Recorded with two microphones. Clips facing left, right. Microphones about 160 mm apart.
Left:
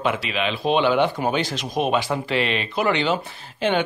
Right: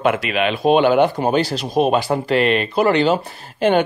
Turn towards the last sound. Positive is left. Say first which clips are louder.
# right 6 dB
turn(degrees=-45)  # may be behind; listen again after turning